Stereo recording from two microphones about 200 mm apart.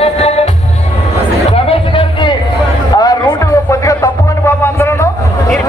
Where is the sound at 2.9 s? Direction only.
20° left (ahead or behind).